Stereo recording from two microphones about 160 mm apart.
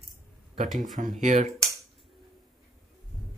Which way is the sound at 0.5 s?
50° right (ahead or behind).